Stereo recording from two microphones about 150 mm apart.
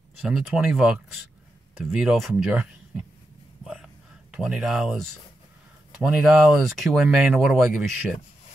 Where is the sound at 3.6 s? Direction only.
5° right (ahead or behind).